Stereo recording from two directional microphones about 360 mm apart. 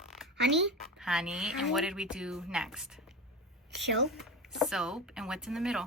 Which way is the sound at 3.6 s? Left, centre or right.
Right.